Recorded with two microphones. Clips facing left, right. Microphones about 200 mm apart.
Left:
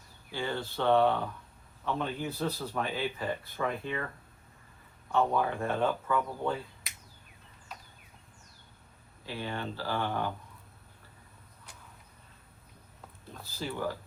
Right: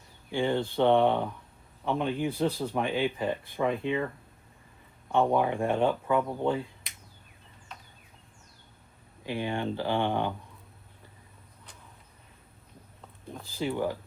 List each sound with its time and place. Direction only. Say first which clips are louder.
0.3 s a man's voice: right 7 dB; 20° right (ahead or behind)
5.1 s a man's voice: right 3 dB; 20° right (ahead or behind)
9.2 s speech: right 6 dB; 15° right (ahead or behind)
13.6 s a man's voice: right 5 dB; 20° right (ahead or behind)